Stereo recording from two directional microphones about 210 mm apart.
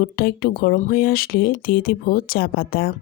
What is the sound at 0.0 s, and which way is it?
Speech, 45° left (ahead or behind).